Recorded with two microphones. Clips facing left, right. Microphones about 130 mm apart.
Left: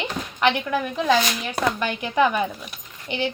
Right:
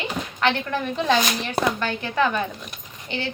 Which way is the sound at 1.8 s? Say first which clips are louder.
Left 2 dB; 15° left (ahead or behind).